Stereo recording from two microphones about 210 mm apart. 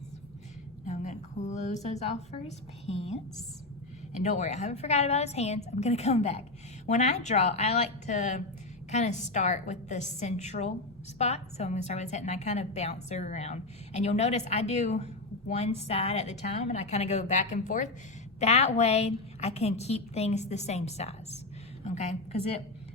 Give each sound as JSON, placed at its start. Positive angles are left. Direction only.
{"t": 0.9, "sound": "a woman's voice", "side_deg": 35}